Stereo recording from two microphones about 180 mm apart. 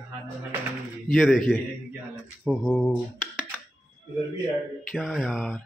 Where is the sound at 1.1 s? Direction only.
Centre (ahead or behind).